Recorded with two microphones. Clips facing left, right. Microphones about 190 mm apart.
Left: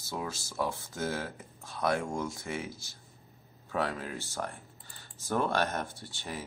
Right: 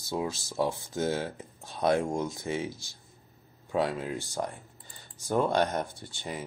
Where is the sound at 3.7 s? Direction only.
20° right (ahead or behind).